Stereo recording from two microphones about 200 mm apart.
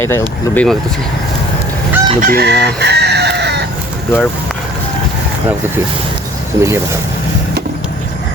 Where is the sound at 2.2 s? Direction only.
50° right (ahead or behind).